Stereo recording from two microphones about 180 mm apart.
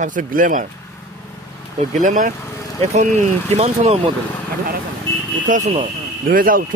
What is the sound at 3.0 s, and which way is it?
Speech, 40° right (ahead or behind).